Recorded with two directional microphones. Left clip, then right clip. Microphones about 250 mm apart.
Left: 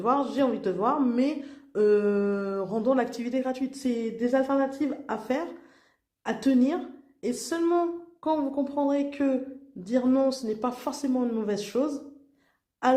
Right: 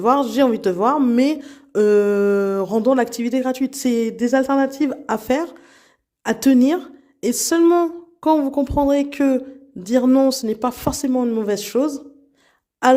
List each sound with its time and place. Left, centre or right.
0.0 s speech: right